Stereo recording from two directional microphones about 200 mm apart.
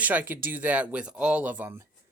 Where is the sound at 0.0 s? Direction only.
10° right (ahead or behind).